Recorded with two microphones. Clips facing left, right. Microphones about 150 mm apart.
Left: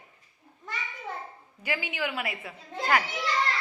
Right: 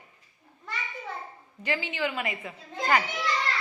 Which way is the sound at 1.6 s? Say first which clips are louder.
Right 2 dB; 10° left (ahead or behind).